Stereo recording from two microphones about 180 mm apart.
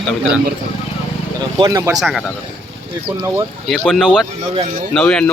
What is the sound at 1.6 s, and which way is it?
Speech, 20° right (ahead or behind).